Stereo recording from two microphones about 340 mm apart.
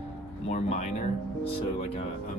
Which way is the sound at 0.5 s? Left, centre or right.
Centre.